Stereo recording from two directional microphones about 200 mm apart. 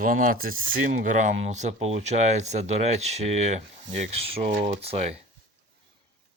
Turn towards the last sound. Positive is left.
turn(degrees=-30)  # may be behind; listen again after turning